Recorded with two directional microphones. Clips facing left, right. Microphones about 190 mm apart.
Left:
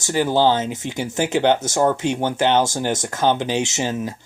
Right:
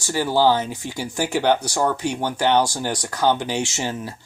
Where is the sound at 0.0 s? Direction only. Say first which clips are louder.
Left 1 dB; 20° left (ahead or behind).